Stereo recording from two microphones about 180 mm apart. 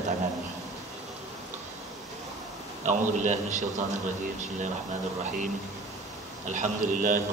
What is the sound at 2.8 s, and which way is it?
A man's voice, 45° right (ahead or behind).